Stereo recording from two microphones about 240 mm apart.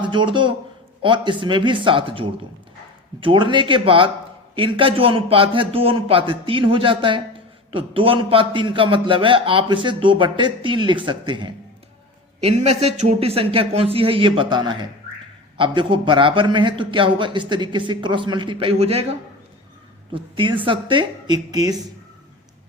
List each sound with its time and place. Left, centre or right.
0.0 s a man's voice: centre
20.1 s a man's voice: right